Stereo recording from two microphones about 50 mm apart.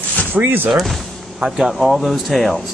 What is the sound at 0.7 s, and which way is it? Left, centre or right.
Speech, centre.